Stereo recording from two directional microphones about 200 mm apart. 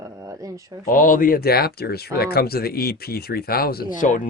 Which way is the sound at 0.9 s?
40° left (ahead or behind).